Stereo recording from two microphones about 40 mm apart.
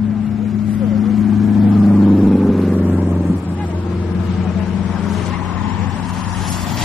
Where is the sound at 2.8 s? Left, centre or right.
Right.